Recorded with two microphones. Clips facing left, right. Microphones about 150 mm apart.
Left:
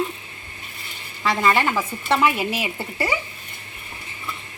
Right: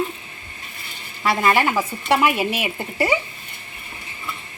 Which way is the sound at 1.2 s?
10° right (ahead or behind).